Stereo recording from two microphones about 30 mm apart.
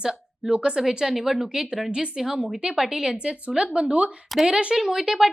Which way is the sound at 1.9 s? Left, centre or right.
Right.